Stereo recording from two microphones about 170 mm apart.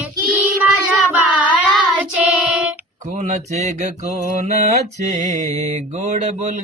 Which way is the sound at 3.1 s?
45° right (ahead or behind).